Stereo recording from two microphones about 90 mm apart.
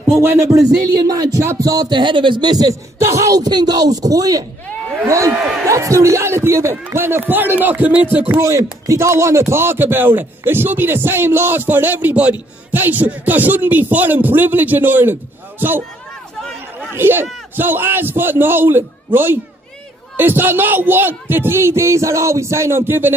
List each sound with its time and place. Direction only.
0.1 s speech: 35° right (ahead or behind)
1.9 s a man's voice: 60° right (ahead or behind)
2.5 s speech: 40° right (ahead or behind); by 8.4 s 20° right (ahead or behind)
8.4 s speech: 35° right (ahead or behind)
16.9 s speech: 25° right (ahead or behind)